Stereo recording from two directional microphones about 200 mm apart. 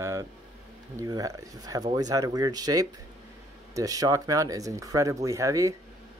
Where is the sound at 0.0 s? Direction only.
15° right (ahead or behind).